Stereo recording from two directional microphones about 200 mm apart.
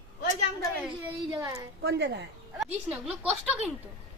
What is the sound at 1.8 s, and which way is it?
Speech, 55° right (ahead or behind).